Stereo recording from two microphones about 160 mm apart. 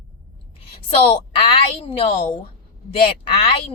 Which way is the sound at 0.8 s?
35° left (ahead or behind).